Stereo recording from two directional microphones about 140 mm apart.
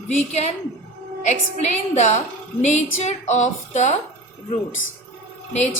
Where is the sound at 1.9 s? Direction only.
55° left (ahead or behind).